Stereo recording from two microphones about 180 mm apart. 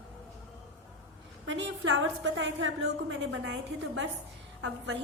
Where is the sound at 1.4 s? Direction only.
85° right.